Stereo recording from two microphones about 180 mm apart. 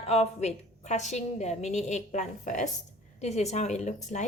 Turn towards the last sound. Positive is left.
turn(degrees=40)  # may be behind; listen again after turning